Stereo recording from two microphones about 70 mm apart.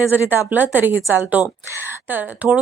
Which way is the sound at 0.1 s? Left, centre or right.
Right.